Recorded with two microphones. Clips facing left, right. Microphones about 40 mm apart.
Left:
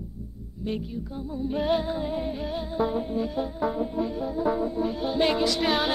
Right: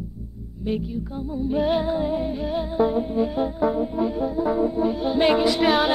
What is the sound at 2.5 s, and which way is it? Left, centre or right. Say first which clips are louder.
Music: right 6 dB; centre.